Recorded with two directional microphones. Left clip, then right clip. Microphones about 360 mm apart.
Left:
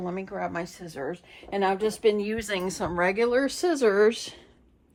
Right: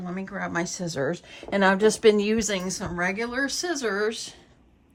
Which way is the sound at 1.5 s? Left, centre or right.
Right.